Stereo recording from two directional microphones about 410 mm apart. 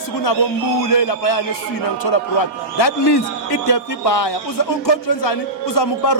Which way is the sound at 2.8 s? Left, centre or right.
Left.